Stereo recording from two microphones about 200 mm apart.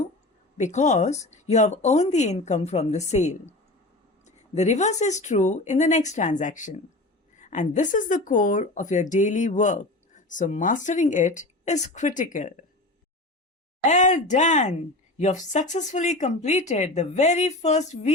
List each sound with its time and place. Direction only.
0.5 s speech: 35° left (ahead or behind)
13.8 s speech: 35° left (ahead or behind)